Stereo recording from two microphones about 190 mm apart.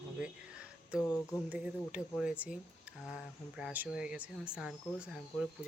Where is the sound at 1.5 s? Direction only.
5° right (ahead or behind).